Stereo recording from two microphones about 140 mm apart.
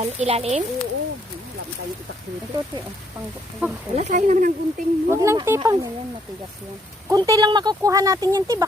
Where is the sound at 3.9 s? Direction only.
55° right (ahead or behind).